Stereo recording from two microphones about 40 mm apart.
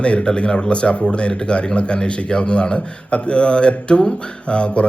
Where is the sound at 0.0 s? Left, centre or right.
Left.